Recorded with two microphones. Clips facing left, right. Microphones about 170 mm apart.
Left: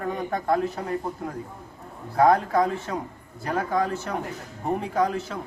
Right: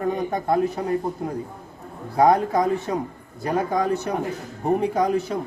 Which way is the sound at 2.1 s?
20° right (ahead or behind).